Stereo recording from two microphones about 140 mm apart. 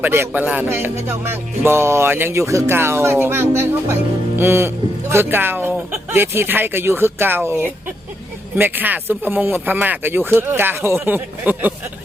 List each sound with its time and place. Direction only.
0.0 s speech: 15° right (ahead or behind)